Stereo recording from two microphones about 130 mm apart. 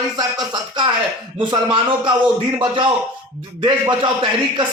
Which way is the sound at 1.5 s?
40° right (ahead or behind).